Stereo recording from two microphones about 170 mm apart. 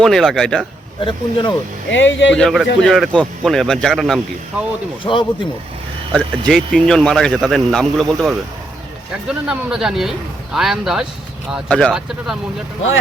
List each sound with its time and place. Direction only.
0.0 s speech: centre (ahead or behind)
1.0 s speech: 30° left (ahead or behind)
1.9 s speech: 90° left
2.3 s speech: centre (ahead or behind)
5.0 s speech: 25° left (ahead or behind)
6.1 s speech: centre (ahead or behind)